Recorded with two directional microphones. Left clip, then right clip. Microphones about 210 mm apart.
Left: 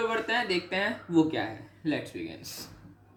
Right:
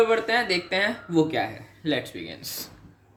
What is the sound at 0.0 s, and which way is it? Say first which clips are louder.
Speech: right 7 dB; 45° right (ahead or behind).